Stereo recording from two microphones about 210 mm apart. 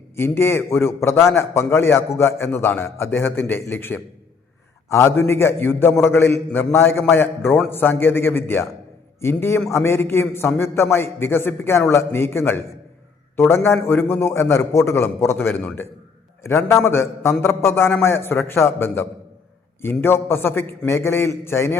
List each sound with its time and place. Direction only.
0.2 s a man's voice: 10° left (ahead or behind)